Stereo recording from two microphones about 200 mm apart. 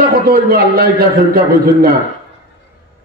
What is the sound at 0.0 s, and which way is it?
A man's voice, 50° right (ahead or behind).